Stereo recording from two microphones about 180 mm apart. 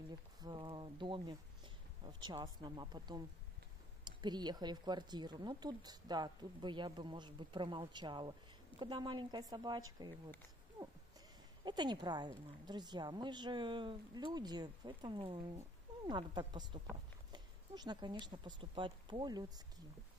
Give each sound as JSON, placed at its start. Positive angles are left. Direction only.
{"t": 0.4, "sound": "speech", "side_deg": -25}
{"t": 11.6, "sound": "speech", "side_deg": -25}
{"t": 16.9, "sound": "a sound", "side_deg": -25}
{"t": 18.2, "sound": "speech", "side_deg": -25}